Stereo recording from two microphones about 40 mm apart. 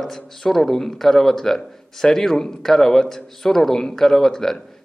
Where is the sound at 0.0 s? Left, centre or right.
Centre.